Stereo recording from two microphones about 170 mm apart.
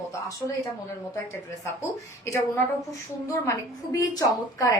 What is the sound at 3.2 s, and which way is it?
A woman's voice, 15° left (ahead or behind).